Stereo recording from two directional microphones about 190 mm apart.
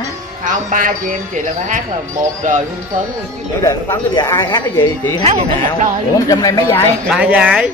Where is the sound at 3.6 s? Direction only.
15° left (ahead or behind).